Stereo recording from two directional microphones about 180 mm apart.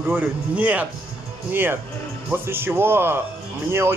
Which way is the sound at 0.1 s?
10° right (ahead or behind).